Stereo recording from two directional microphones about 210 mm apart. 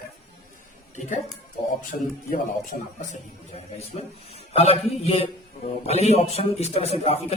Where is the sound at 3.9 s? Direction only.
30° left (ahead or behind).